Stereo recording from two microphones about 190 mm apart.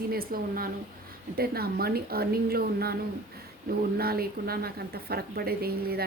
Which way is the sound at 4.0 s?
55° right (ahead or behind).